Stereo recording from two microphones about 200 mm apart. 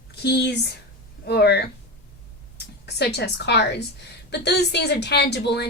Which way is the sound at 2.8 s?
55° left (ahead or behind).